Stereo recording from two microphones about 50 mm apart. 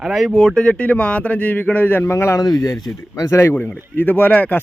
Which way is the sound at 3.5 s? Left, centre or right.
Left.